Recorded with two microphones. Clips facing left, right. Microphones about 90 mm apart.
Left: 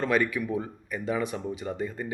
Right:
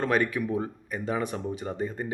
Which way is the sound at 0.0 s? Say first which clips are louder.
Even; 35° right (ahead or behind).